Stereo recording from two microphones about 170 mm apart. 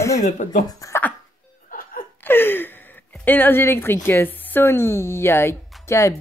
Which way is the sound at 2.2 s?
15° left (ahead or behind).